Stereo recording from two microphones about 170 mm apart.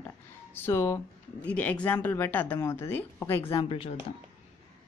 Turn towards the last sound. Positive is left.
turn(degrees=30)  # may be behind; listen again after turning